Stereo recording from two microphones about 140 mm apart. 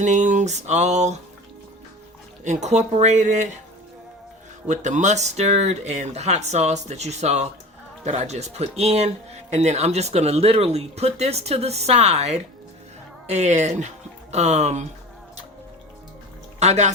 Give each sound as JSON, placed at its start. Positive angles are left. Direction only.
{"t": 0.0, "sound": "speech", "side_deg": -60}
{"t": 2.4, "sound": "speech", "side_deg": -55}
{"t": 4.7, "sound": "speech", "side_deg": -60}
{"t": 16.6, "sound": "speech", "side_deg": -55}